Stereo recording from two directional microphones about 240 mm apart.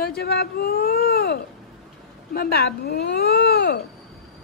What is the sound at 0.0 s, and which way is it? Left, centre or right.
Speech, left.